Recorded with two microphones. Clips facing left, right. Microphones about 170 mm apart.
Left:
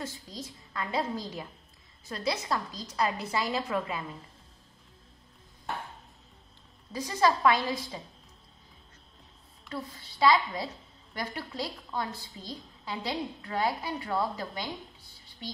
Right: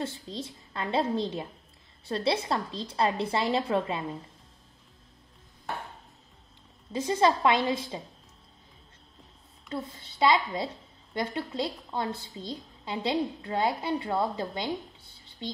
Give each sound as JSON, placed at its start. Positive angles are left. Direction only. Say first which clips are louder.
{"t": 0.0, "sound": "a woman's voice", "louder": "right 5 dB", "side_deg": -30}
{"t": 6.9, "sound": "a woman's voice", "louder": "right 2 dB", "side_deg": -25}
{"t": 9.7, "sound": "a woman's voice", "louder": "right 3 dB", "side_deg": -25}